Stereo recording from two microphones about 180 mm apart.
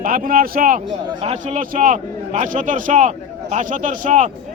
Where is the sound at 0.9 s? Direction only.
30° right (ahead or behind).